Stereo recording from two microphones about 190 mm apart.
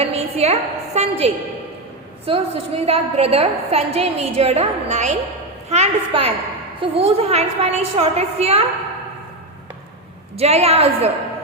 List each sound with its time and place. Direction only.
0.0 s a woman's voice: 35° right (ahead or behind)
10.3 s a woman's voice: 35° right (ahead or behind)